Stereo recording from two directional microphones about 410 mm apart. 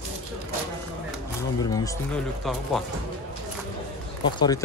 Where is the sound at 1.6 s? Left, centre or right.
Centre.